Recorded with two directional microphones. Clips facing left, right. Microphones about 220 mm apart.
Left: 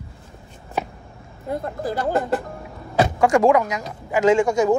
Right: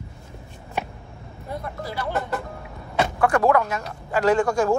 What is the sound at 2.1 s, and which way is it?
Speech, 30° left (ahead or behind).